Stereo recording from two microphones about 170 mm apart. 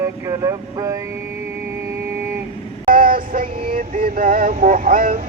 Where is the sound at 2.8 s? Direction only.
55° right (ahead or behind).